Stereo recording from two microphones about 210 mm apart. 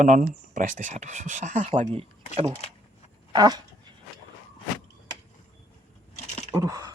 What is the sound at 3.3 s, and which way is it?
Dog, 20° right (ahead or behind).